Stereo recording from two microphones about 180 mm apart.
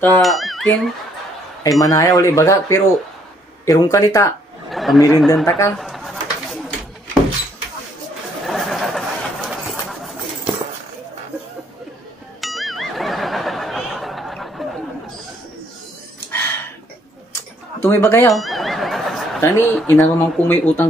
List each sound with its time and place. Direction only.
0.2 s speech: centre (ahead or behind)
1.6 s speech: 20° left (ahead or behind)
4.6 s speech: centre (ahead or behind)
5.5 s speech: 15° left (ahead or behind)
5.8 s pigeon: centre (ahead or behind)
8.5 s bird: centre (ahead or behind)
12.4 s music: centre (ahead or behind)
16.3 s a sound: 10° left (ahead or behind)
17.8 s speech: 15° left (ahead or behind)
18.3 s a sound: centre (ahead or behind)
19.4 s speech: 15° left (ahead or behind)